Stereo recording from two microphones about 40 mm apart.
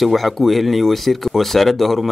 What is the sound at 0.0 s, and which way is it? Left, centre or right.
Speech, centre.